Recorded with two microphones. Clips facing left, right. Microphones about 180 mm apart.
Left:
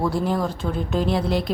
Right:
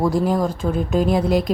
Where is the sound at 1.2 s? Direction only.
45° right (ahead or behind).